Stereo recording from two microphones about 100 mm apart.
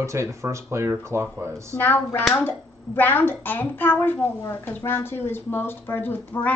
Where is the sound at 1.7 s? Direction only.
20° left (ahead or behind).